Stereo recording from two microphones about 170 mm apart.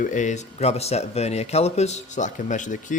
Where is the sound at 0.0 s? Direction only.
45° left (ahead or behind).